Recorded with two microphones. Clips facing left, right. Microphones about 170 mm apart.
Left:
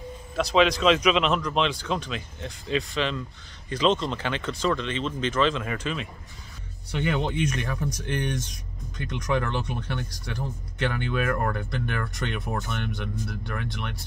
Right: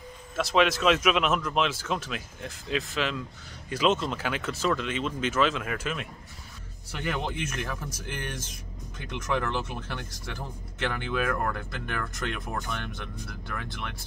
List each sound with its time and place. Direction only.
0.4 s speech: centre (ahead or behind)